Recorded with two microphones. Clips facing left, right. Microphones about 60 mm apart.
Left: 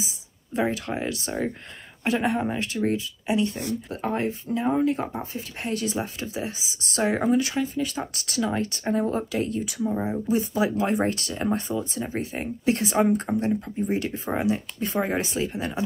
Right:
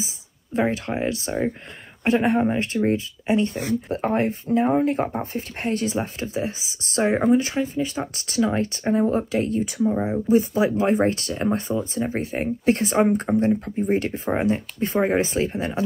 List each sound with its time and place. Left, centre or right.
0.0 s speech: right
7.0 s speech: centre
7.3 s speech: right
9.8 s speech: centre
10.2 s speech: right